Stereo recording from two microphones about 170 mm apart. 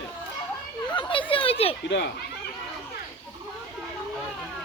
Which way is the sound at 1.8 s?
90° left.